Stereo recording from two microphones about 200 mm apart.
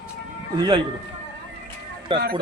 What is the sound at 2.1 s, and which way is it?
Speech, 25° right (ahead or behind).